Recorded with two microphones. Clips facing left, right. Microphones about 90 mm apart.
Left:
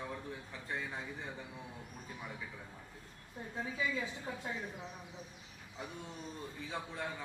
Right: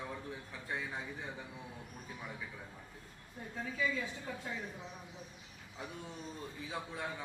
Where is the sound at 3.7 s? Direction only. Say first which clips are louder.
Right 2 dB; 15° left (ahead or behind).